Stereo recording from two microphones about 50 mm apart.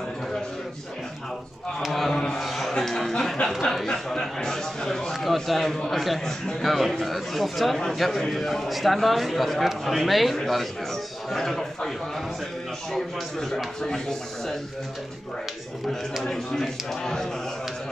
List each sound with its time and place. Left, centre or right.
1.8 s a sound: centre
3.7 s a man's voice: centre
12.9 s a man's voice: centre
15.9 s a man's voice: centre